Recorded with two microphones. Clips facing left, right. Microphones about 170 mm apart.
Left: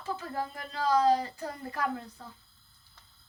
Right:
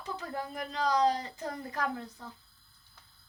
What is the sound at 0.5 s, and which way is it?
Speech, 20° right (ahead or behind).